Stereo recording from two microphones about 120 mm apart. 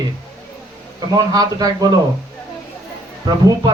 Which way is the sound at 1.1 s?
30° right (ahead or behind).